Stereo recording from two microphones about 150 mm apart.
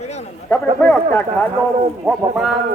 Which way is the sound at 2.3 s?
Centre (ahead or behind).